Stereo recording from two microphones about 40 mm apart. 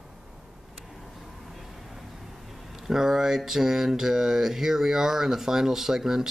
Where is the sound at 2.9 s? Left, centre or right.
Centre.